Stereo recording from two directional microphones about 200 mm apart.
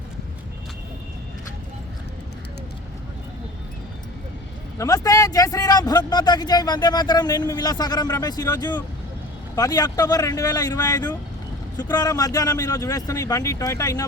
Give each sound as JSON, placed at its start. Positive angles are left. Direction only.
{"t": 4.8, "sound": "speech", "side_deg": 20}